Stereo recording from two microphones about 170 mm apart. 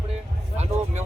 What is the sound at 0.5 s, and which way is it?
Speech, 40° right (ahead or behind).